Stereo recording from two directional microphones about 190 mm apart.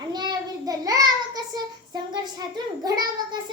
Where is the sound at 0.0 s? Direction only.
20° right (ahead or behind).